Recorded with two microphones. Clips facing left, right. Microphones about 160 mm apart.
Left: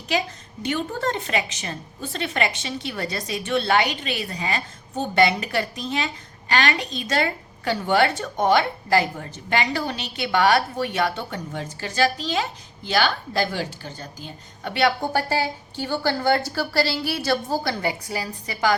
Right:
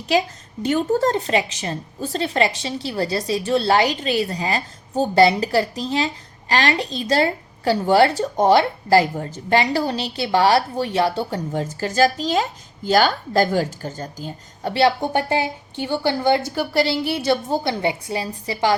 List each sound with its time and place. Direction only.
0.6 s a woman's voice: 40° right (ahead or behind)